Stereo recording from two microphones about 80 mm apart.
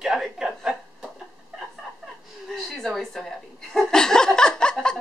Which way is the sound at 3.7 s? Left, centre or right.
Centre.